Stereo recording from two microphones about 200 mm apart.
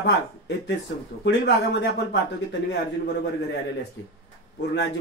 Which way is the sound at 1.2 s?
55° left (ahead or behind).